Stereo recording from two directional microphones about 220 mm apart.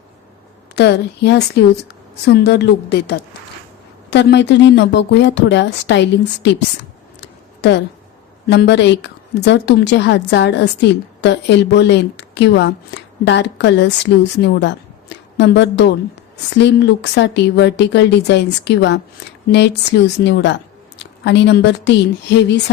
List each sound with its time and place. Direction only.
0.8 s a woman's voice: 50° left (ahead or behind)
7.2 s a sound: 50° left (ahead or behind)
8.4 s a woman's voice: 50° left (ahead or behind)